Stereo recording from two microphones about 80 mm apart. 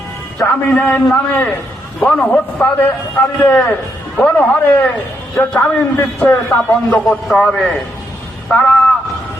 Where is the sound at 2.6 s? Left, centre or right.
Left.